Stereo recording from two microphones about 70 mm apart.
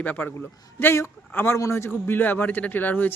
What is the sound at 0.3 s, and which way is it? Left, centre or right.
A man's voice, left.